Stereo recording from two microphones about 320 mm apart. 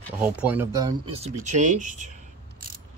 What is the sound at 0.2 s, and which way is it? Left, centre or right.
Speech, centre.